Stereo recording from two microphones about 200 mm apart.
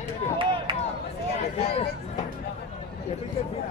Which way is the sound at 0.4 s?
25° right (ahead or behind).